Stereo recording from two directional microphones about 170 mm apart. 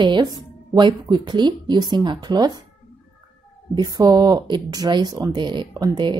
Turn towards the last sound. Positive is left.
turn(degrees=-25)  # may be behind; listen again after turning